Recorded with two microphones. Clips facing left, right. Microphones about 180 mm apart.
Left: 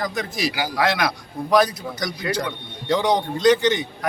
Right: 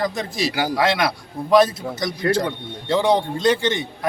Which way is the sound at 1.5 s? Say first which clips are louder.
Right 3 dB; 25° right (ahead or behind).